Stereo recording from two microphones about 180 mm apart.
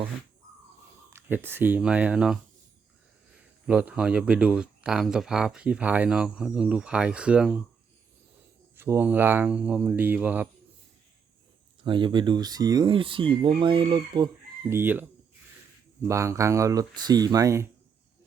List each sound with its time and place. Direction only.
1.1 s speech: 10° right (ahead or behind)
3.7 s speech: 5° right (ahead or behind)
8.7 s speech: 10° right (ahead or behind)
11.8 s speech: 25° right (ahead or behind)
14.7 s speech: 10° right (ahead or behind)